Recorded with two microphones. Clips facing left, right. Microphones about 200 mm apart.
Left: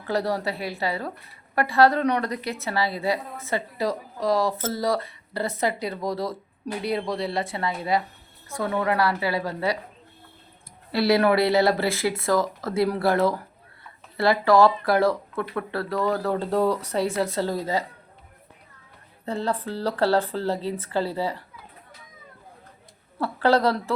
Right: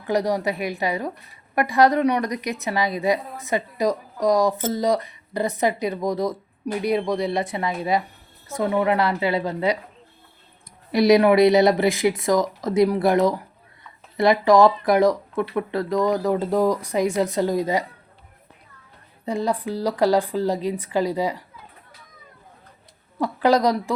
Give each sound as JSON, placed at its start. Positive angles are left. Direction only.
{"t": 0.1, "sound": "a woman's voice", "side_deg": -15}
{"t": 10.9, "sound": "a woman's voice", "side_deg": -15}
{"t": 19.2, "sound": "a woman's voice", "side_deg": -15}
{"t": 23.2, "sound": "a woman's voice", "side_deg": -15}